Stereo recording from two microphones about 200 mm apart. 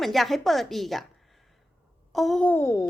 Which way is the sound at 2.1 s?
Centre (ahead or behind).